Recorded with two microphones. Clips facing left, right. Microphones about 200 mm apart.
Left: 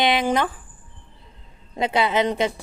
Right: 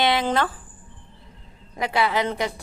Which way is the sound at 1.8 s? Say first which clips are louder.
Left 2 dB; 20° left (ahead or behind).